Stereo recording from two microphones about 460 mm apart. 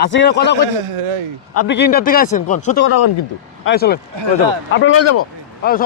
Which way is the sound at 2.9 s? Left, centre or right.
Left.